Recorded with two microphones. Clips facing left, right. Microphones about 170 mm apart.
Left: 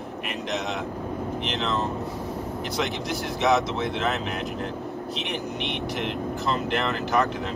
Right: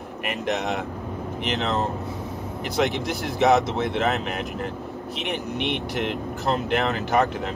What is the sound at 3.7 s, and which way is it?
Speech, 55° right (ahead or behind).